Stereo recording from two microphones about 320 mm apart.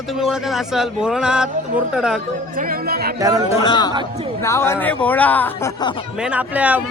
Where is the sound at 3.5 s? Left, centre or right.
Centre.